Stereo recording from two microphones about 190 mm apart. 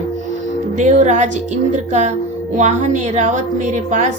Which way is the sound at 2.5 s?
40° right (ahead or behind).